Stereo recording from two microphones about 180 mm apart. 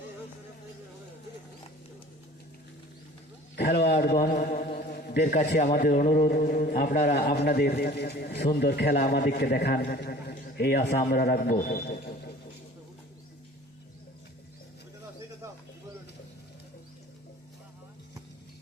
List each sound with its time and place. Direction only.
3.9 s chant: 55° left (ahead or behind)
4.8 s a sound: 55° left (ahead or behind)
5.5 s a man's voice: 45° left (ahead or behind)
9.5 s a man's voice: 65° left (ahead or behind)